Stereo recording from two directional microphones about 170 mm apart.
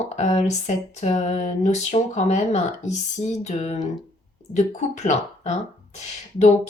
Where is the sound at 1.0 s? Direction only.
40° left (ahead or behind).